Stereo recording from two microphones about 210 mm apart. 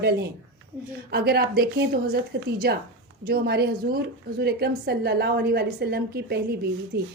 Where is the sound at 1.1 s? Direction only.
50° right (ahead or behind).